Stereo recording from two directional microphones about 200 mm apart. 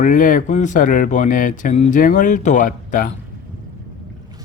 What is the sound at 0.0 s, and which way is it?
Speech, 40° left (ahead or behind).